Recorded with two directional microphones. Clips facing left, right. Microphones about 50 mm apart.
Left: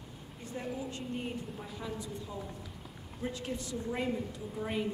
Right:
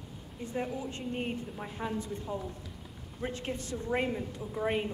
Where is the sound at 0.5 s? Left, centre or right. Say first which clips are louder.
Right 3 dB; right.